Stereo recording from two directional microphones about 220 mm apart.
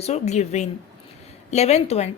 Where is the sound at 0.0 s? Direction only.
30° left (ahead or behind).